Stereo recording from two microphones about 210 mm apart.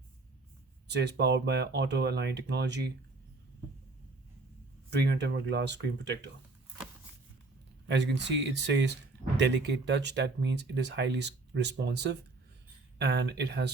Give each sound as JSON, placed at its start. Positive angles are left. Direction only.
{"t": 0.9, "sound": "speech", "side_deg": -55}
{"t": 4.9, "sound": "speech", "side_deg": -55}
{"t": 7.9, "sound": "speech", "side_deg": -55}